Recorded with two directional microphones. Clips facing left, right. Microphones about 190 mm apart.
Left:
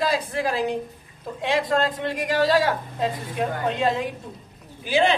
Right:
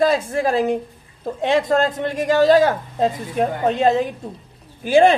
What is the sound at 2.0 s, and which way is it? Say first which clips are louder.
A woman's voice: right 6 dB; 45° right (ahead or behind).